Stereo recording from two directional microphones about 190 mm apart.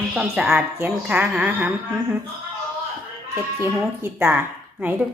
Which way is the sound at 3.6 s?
10° right (ahead or behind).